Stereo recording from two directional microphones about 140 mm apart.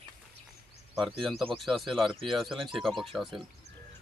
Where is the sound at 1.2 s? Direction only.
5° left (ahead or behind).